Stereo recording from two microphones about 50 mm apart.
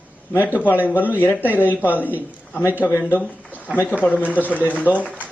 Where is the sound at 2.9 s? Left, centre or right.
Left.